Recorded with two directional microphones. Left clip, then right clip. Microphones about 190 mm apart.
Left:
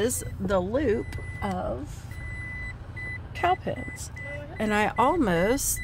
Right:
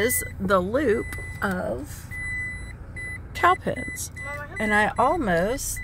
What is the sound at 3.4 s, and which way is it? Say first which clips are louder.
Speech: right 5 dB; 25° right (ahead or behind).